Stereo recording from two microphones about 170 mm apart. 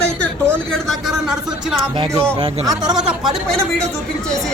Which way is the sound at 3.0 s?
Centre (ahead or behind).